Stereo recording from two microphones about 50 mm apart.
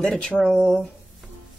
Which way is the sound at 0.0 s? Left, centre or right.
Left.